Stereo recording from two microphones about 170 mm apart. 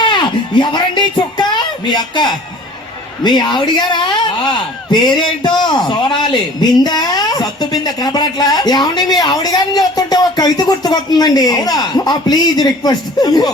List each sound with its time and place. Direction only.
0.0 s a woman's voice: 25° left (ahead or behind)